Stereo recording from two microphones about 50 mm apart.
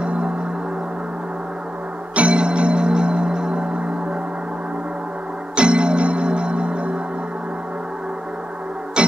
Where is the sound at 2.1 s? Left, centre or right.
Right.